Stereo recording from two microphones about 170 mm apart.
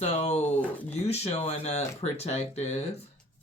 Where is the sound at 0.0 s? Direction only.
40° left (ahead or behind).